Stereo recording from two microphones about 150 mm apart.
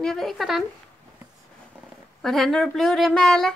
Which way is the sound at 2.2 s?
Centre (ahead or behind).